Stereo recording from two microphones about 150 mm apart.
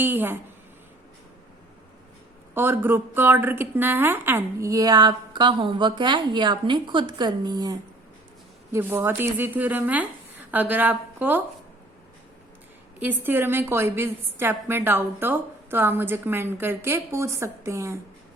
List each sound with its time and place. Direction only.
0.0 s a woman's voice: 15° right (ahead or behind)
2.6 s a woman's voice: 15° right (ahead or behind)
8.7 s a woman's voice: 15° right (ahead or behind)
13.0 s a woman's voice: 15° right (ahead or behind)